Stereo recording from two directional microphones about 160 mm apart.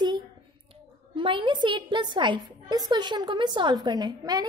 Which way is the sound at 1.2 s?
30° right (ahead or behind).